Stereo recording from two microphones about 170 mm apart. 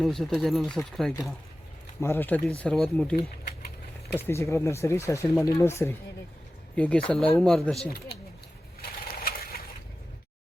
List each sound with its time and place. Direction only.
0.0 s speech: centre (ahead or behind)
2.0 s speech: 15° left (ahead or behind)
4.3 s speech: 15° left (ahead or behind)
7.9 s speech: 70° left (ahead or behind)
8.8 s a sound: 60° left (ahead or behind)